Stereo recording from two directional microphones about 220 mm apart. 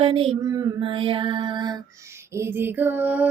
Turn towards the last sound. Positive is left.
turn(degrees=-5)  # may be behind; listen again after turning